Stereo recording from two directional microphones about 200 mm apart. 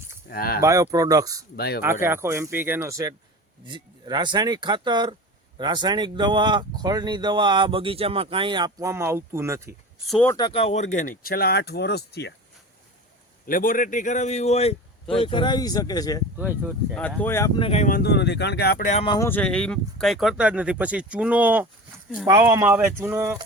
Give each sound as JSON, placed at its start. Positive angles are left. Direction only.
{"t": 0.3, "sound": "speech", "side_deg": 50}
{"t": 0.6, "sound": "speech", "side_deg": -15}
{"t": 1.5, "sound": "speech", "side_deg": 55}
{"t": 1.8, "sound": "speech", "side_deg": -10}
{"t": 10.1, "sound": "speech", "side_deg": 5}
{"t": 10.3, "sound": "speech", "side_deg": 25}
{"t": 13.5, "sound": "a man's voice", "side_deg": 45}
{"t": 16.4, "sound": "speech", "side_deg": -10}
{"t": 16.9, "sound": "speech", "side_deg": 5}
{"t": 17.6, "sound": "speech", "side_deg": 30}
{"t": 18.9, "sound": "speech", "side_deg": 20}
{"t": 19.3, "sound": "speech", "side_deg": 5}